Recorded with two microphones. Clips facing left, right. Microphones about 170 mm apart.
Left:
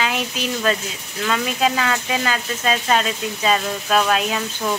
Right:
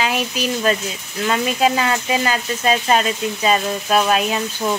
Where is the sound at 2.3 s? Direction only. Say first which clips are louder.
Right 3 dB; 15° right (ahead or behind).